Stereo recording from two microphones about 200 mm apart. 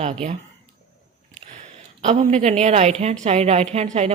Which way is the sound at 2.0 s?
35° right (ahead or behind).